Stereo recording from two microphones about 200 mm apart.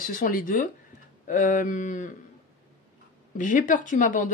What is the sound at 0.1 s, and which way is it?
A woman's voice, 45° left (ahead or behind).